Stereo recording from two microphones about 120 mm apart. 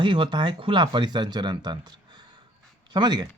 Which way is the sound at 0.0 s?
40° right (ahead or behind).